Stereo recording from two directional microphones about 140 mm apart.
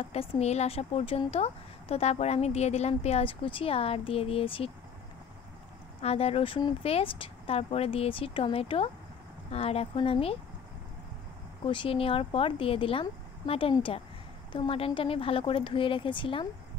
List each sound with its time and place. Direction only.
0.0 s speech: 45° left (ahead or behind)
5.9 s speech: 45° left (ahead or behind)
11.6 s speech: 40° left (ahead or behind)